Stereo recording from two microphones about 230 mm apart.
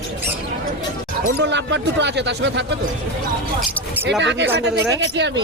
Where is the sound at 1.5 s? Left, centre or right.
Right.